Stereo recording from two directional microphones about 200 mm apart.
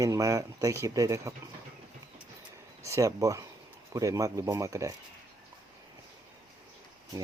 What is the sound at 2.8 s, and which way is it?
Speech, 15° right (ahead or behind).